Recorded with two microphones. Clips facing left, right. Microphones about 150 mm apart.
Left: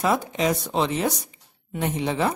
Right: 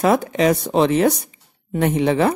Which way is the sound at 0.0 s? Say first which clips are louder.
Right 6 dB; 65° right (ahead or behind).